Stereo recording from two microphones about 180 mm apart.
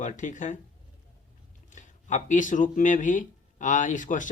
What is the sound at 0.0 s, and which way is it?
Speech, 45° left (ahead or behind).